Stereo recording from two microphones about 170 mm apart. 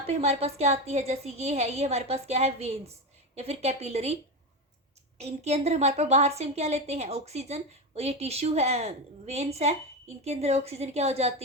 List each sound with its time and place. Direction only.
0.0 s a woman's voice: 40° right (ahead or behind)